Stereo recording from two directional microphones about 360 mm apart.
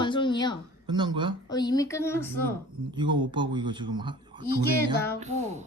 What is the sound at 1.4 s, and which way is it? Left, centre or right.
Speech, centre.